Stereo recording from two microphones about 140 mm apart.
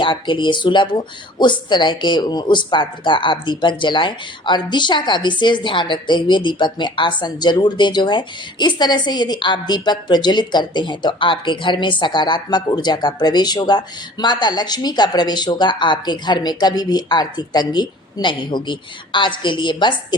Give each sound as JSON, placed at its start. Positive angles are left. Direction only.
{"t": 0.0, "sound": "speech", "side_deg": 35}